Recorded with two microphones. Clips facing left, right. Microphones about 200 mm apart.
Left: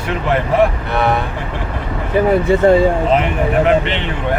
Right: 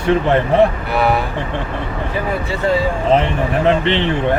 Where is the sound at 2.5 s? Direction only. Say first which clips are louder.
Left 10 dB; 55° left (ahead or behind).